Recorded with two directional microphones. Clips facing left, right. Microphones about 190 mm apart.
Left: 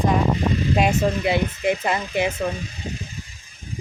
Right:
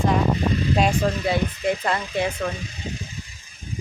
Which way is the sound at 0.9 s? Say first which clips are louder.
Left 2 dB; 20° left (ahead or behind).